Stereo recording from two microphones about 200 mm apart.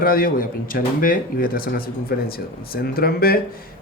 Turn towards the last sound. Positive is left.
turn(degrees=50)  # may be behind; listen again after turning